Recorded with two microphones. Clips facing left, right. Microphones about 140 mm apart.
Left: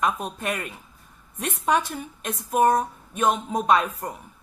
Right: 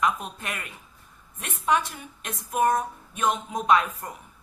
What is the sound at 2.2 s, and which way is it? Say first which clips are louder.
Speech: left 3 dB; 35° left (ahead or behind).